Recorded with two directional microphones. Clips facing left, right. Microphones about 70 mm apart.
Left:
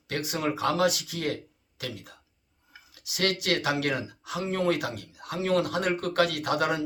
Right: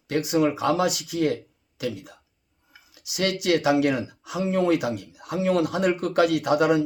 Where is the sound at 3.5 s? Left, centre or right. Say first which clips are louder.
Right 11 dB; centre.